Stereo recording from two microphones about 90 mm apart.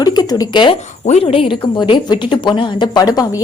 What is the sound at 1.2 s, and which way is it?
Speech, 85° left.